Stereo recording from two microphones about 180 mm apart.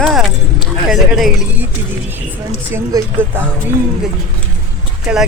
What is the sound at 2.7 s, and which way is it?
Speech, 15° right (ahead or behind).